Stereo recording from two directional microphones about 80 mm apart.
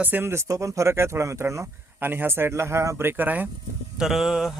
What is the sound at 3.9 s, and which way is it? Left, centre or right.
Speech, centre.